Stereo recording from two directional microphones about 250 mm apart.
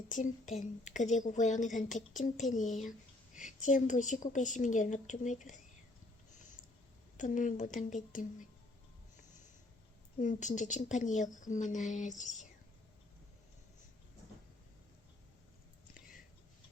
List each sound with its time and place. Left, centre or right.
0.1 s a woman's voice: left
7.2 s a woman's voice: left
10.2 s a woman's voice: left
16.0 s whispering: centre